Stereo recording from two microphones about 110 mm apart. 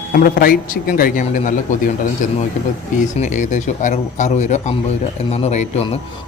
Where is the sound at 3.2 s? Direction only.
90° left; by 6.0 s 70° left (ahead or behind).